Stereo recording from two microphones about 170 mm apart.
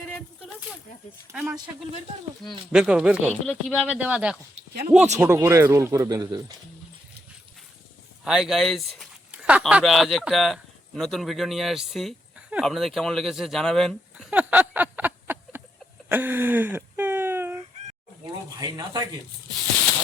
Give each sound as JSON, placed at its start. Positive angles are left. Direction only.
{"t": 1.5, "sound": "speech", "side_deg": -25}
{"t": 2.7, "sound": "speech", "side_deg": -5}
{"t": 3.2, "sound": "speech", "side_deg": 10}
{"t": 8.2, "sound": "speech", "side_deg": -5}
{"t": 16.0, "sound": "a sound", "side_deg": -10}
{"t": 18.6, "sound": "speech", "side_deg": -25}